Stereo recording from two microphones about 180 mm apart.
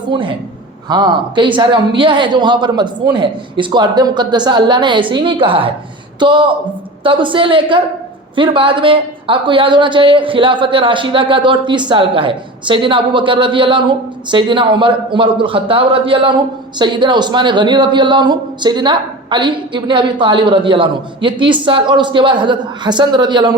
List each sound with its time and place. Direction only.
0.1 s a woman's voice: 30° right (ahead or behind)